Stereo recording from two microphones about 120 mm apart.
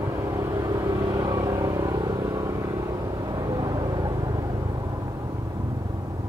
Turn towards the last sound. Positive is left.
turn(degrees=-30)  # may be behind; listen again after turning